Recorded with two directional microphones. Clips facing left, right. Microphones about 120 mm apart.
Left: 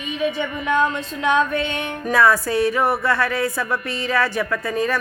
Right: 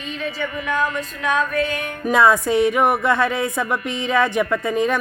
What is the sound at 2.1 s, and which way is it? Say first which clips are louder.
Speech: right 2 dB; 20° right (ahead or behind).